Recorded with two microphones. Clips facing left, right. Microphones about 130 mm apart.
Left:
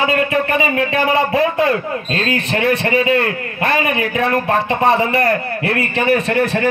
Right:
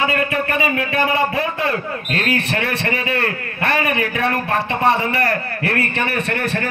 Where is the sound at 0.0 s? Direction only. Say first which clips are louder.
Left 3 dB; 25° left (ahead or behind).